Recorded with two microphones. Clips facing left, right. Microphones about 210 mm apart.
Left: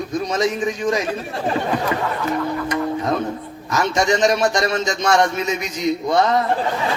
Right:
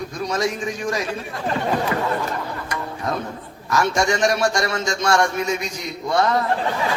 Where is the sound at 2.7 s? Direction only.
20° left (ahead or behind).